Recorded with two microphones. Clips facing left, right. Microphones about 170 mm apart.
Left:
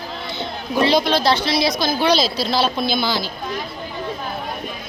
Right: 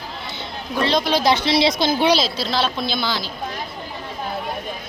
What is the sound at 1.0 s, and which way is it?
Speech, 15° right (ahead or behind).